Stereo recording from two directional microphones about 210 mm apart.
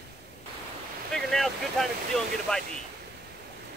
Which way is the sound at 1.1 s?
Centre (ahead or behind).